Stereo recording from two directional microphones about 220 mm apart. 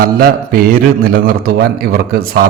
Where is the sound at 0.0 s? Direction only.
40° right (ahead or behind).